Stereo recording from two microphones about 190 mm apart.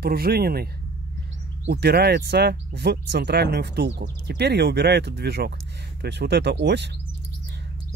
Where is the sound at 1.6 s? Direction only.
60° right (ahead or behind).